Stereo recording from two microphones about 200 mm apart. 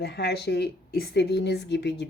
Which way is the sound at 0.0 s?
55° left (ahead or behind).